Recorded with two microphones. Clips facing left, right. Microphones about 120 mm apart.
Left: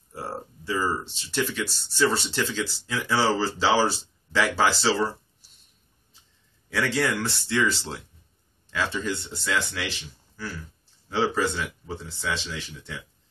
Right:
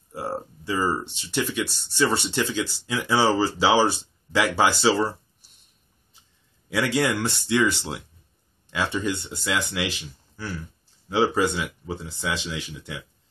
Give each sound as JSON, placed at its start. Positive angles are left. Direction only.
{"t": 0.1, "sound": "speech", "side_deg": -15}
{"t": 6.7, "sound": "speech", "side_deg": -10}